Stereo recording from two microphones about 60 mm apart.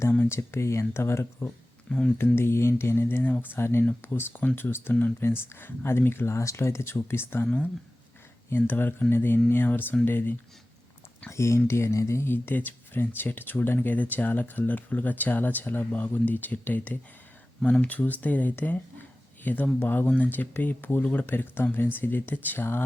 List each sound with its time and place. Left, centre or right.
0.3 s speech: left
1.9 s speech: centre
2.1 s speech: left
8.5 s speech: left
11.3 s speech: left
17.6 s speech: centre; by 22.8 s left